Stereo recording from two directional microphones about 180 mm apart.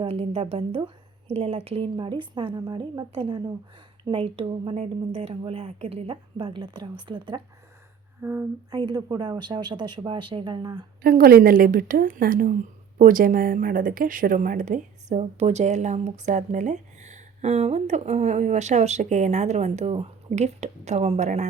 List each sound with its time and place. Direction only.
0.0 s a woman's voice: 35° right (ahead or behind)
8.2 s speech: 10° right (ahead or behind)
8.7 s a woman's voice: 25° right (ahead or behind)
11.0 s a woman's voice: 55° right (ahead or behind); by 21.5 s 40° right (ahead or behind)